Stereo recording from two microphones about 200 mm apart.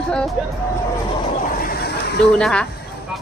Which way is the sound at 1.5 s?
50° left (ahead or behind).